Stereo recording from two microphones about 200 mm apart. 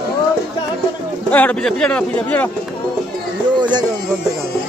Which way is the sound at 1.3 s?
5° left (ahead or behind).